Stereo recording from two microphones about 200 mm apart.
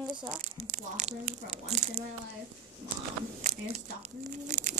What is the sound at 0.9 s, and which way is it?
Biting, 35° right (ahead or behind).